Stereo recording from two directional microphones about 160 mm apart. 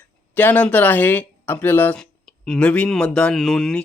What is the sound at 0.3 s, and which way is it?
Speech, 10° left (ahead or behind).